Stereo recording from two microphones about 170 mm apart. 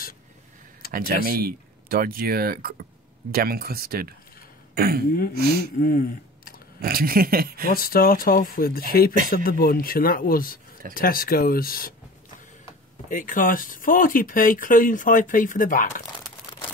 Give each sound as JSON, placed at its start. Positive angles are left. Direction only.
{"t": 0.9, "sound": "speech", "side_deg": -60}
{"t": 5.8, "sound": "speech", "side_deg": 60}
{"t": 6.8, "sound": "speech", "side_deg": -60}
{"t": 7.7, "sound": "speech", "side_deg": 60}
{"t": 13.1, "sound": "speech", "side_deg": 50}